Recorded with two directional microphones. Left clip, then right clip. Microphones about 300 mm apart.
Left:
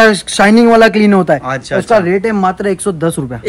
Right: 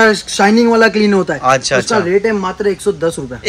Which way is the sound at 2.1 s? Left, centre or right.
Left.